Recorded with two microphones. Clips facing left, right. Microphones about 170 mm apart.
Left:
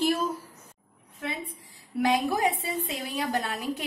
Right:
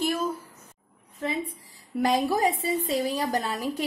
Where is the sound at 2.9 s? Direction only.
40° right (ahead or behind).